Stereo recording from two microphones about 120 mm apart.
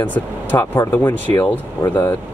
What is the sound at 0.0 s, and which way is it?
Speech, 15° left (ahead or behind).